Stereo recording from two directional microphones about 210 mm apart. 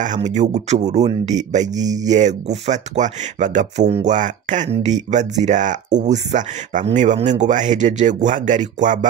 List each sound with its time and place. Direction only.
0.0 s speech: 35° right (ahead or behind)